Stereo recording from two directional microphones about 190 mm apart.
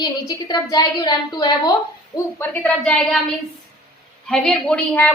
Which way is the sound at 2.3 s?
10° left (ahead or behind).